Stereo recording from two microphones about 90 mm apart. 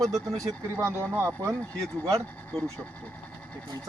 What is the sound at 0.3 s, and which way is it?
Speech, 40° right (ahead or behind).